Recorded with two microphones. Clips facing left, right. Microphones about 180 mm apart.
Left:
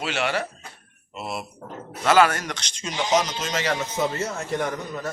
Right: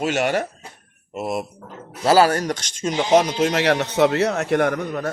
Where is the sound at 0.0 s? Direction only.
45° right (ahead or behind).